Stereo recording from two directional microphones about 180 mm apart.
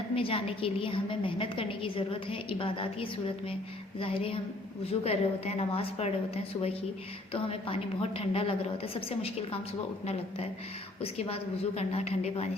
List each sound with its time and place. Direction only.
0.2 s a woman's voice: 30° left (ahead or behind)
11.0 s a woman's voice: 35° left (ahead or behind)